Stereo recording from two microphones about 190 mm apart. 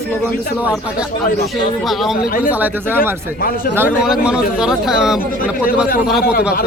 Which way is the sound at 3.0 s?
50° left (ahead or behind).